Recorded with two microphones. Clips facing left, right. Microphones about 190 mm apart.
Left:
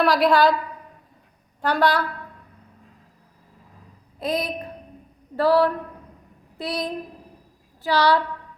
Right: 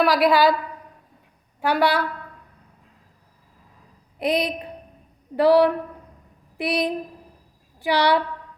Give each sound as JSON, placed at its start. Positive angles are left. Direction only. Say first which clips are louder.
{"t": 0.0, "sound": "a woman's voice", "louder": "even", "side_deg": -5}
{"t": 1.6, "sound": "a woman's voice", "louder": "even", "side_deg": -10}
{"t": 4.2, "sound": "a sound", "louder": "right 3 dB", "side_deg": -15}
{"t": 5.4, "sound": "a woman's voice", "louder": "right 3 dB", "side_deg": -15}